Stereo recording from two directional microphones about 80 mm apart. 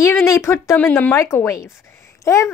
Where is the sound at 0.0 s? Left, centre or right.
Left.